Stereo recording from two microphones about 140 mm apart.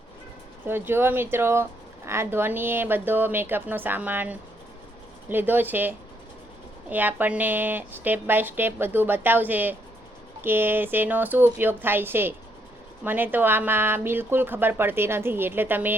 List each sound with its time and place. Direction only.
0.6 s speech: 15° right (ahead or behind)
6.9 s speech: 15° right (ahead or behind)